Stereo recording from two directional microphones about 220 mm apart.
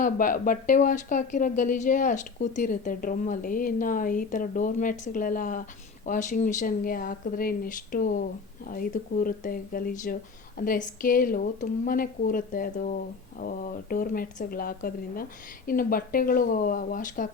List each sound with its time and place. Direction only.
0.0 s speech: 40° left (ahead or behind)